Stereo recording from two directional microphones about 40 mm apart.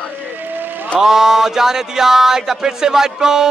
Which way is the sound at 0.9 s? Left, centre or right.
Centre.